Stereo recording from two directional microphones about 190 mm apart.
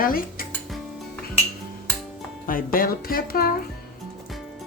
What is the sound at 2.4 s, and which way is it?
Music, 50° left (ahead or behind).